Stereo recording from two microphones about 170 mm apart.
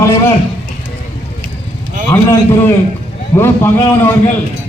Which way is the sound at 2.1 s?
15° left (ahead or behind).